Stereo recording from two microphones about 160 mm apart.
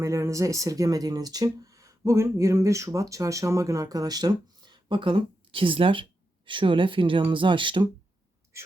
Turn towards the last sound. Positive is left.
turn(degrees=-30)  # may be behind; listen again after turning